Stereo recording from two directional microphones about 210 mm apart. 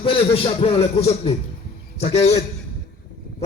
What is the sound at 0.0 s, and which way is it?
Music, 25° left (ahead or behind).